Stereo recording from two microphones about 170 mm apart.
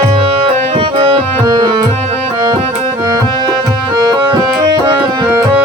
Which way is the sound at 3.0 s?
25° right (ahead or behind).